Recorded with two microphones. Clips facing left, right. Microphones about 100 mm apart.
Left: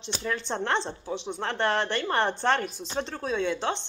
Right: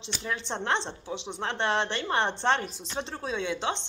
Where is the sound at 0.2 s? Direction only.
20° right (ahead or behind).